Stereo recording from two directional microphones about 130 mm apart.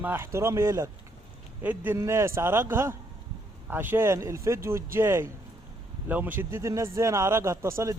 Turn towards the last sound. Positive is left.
turn(degrees=-20)  # may be behind; listen again after turning